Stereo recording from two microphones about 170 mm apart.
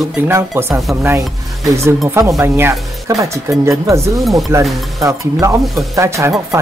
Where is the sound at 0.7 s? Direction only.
Centre (ahead or behind).